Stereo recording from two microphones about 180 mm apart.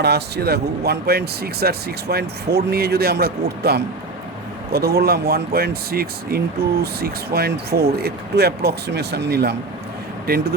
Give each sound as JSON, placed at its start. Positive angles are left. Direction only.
{"t": 0.0, "sound": "speech", "side_deg": -65}